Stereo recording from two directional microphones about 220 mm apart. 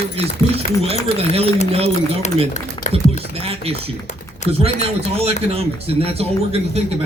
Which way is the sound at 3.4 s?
25° right (ahead or behind).